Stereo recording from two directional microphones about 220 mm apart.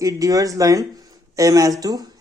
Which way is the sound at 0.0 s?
15° right (ahead or behind).